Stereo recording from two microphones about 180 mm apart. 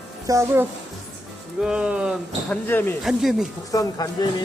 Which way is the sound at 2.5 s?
10° left (ahead or behind).